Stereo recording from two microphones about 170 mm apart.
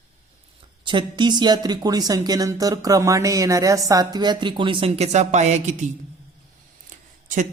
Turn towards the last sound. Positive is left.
turn(degrees=-50)  # may be behind; listen again after turning